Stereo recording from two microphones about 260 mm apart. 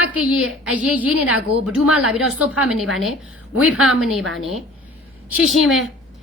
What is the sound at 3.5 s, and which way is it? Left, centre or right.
Speech, left.